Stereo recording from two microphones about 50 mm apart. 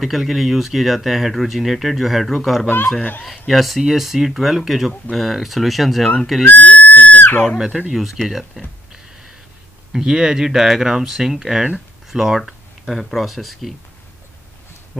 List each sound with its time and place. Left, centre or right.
0.0 s speech: centre
3.0 s speech: left
3.3 s speech: centre
6.4 s a sound: left
7.4 s speech: centre
9.9 s speech: centre